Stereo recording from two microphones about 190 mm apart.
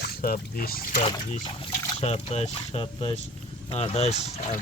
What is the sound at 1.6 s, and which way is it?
Speech, 35° left (ahead or behind).